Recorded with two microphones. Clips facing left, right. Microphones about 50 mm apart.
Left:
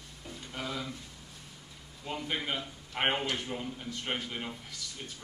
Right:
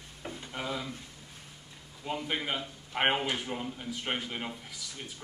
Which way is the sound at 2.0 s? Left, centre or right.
Centre.